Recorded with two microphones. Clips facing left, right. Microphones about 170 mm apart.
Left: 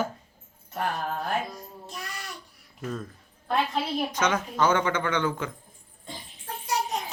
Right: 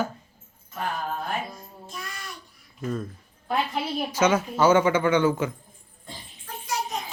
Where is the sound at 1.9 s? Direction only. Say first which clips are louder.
Right 1 dB; 70° left (ahead or behind).